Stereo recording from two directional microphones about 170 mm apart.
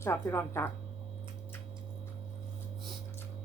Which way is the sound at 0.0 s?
15° left (ahead or behind).